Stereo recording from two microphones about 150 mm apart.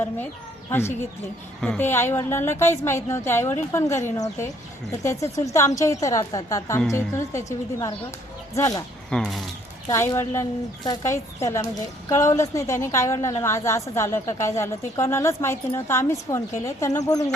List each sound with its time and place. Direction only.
0.7 s a woman's voice: 15° left (ahead or behind)
9.0 s speech: centre (ahead or behind)
9.9 s a woman's voice: 20° left (ahead or behind)